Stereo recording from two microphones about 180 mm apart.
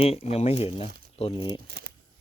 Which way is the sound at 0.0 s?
35° left (ahead or behind).